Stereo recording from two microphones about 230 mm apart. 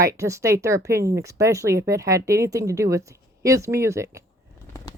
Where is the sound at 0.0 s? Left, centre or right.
Centre.